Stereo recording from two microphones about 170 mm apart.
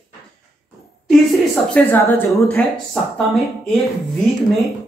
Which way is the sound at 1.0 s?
5° left (ahead or behind).